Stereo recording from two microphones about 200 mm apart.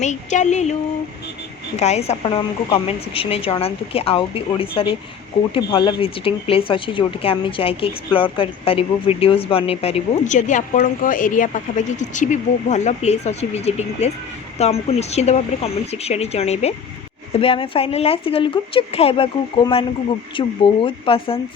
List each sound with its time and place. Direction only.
0.0 s speech: 35° left (ahead or behind)